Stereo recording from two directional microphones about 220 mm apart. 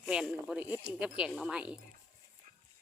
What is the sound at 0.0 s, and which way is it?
Speech, 5° right (ahead or behind).